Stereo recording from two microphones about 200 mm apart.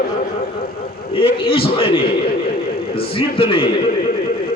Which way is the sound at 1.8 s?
25° left (ahead or behind).